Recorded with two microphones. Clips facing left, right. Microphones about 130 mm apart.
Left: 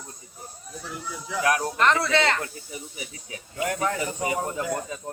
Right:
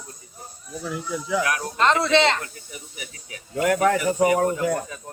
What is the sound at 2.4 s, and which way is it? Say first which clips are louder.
Speech: left 2 dB; 30° left (ahead or behind).